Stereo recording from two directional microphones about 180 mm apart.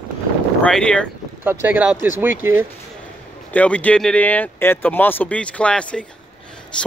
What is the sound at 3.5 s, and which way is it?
Speech, 5° left (ahead or behind).